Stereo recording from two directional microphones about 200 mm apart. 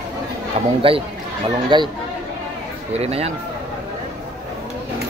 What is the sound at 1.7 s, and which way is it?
Speech, 25° right (ahead or behind).